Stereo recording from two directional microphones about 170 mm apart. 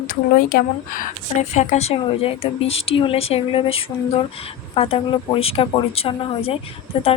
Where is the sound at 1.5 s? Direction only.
45° left (ahead or behind).